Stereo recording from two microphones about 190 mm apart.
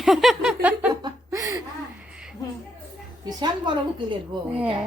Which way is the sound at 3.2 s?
25° right (ahead or behind).